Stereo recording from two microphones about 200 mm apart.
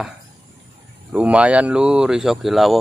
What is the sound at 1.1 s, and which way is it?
Speech, 5° right (ahead or behind).